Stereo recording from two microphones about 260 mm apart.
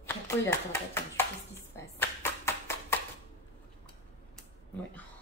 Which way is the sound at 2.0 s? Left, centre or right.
Centre.